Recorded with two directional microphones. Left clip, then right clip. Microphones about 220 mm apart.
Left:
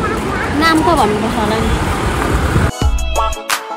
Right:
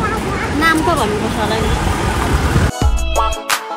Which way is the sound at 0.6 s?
40° left (ahead or behind).